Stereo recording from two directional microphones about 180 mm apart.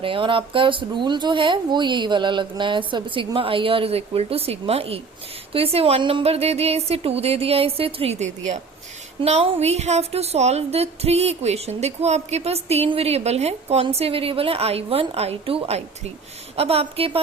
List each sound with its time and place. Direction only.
0.0 s speech: 30° right (ahead or behind)